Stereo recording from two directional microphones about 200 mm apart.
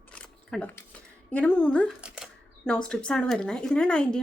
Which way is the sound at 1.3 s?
5° left (ahead or behind).